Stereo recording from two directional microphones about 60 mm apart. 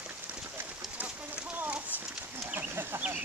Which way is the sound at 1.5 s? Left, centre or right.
Right.